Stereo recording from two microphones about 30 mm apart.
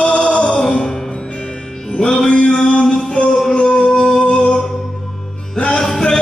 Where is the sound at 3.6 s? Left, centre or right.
Left.